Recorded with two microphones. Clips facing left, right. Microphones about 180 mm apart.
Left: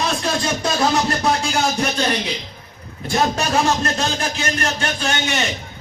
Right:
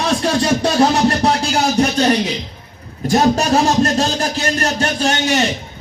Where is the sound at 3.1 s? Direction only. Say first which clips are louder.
Right 6 dB; 40° right (ahead or behind).